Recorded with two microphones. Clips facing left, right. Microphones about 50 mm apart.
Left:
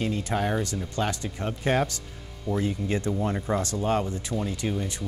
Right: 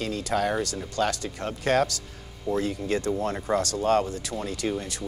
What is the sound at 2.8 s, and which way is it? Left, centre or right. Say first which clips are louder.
Speech: right 1 dB; centre.